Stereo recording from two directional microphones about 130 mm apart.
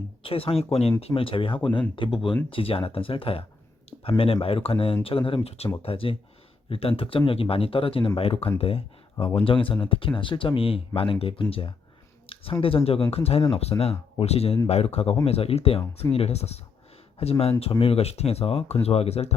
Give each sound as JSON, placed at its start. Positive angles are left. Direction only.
{"t": 0.2, "sound": "speech", "side_deg": 45}
{"t": 4.4, "sound": "speech", "side_deg": 45}